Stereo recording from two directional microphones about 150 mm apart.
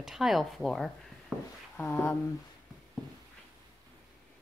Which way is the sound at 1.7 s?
10° left (ahead or behind).